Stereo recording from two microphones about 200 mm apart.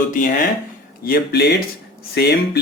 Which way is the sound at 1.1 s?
55° left (ahead or behind).